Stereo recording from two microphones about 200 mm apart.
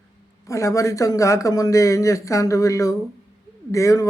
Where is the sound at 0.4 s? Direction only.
15° left (ahead or behind).